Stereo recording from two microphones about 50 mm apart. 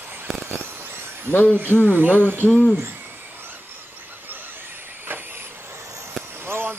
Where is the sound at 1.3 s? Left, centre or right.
Left.